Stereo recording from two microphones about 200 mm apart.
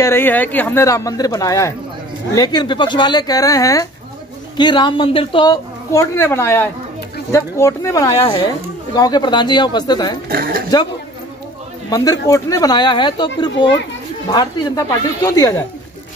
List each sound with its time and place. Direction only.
0.0 s a woman's voice: 10° left (ahead or behind)
10.2 s speech: 50° right (ahead or behind)
11.9 s a woman's voice: 20° left (ahead or behind)